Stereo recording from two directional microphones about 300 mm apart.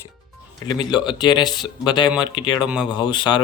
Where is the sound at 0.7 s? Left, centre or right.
Centre.